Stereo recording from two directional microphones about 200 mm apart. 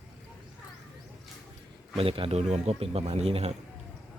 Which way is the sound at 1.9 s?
25° right (ahead or behind).